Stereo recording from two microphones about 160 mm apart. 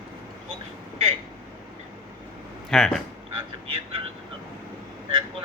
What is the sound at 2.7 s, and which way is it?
Speech, 5° left (ahead or behind).